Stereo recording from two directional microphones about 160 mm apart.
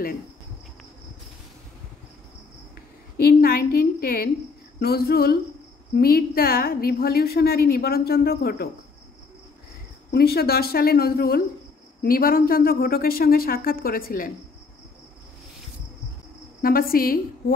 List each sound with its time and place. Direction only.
3.2 s a woman's voice: 70° left (ahead or behind)
10.1 s a woman's voice: 75° left (ahead or behind)
16.6 s speech: 65° left (ahead or behind)